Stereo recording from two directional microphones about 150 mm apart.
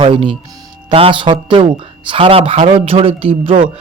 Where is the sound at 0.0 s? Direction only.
35° right (ahead or behind).